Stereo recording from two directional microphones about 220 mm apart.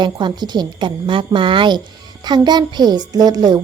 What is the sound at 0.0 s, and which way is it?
Speech, 20° right (ahead or behind).